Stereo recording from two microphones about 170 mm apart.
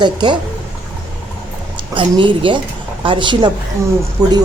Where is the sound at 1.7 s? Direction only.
30° right (ahead or behind).